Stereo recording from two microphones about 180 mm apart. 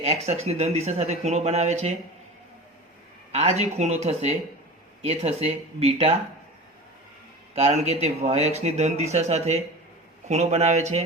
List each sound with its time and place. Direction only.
0.0 s speech: 35° right (ahead or behind)
3.3 s speech: 35° right (ahead or behind)
7.5 s speech: 35° right (ahead or behind)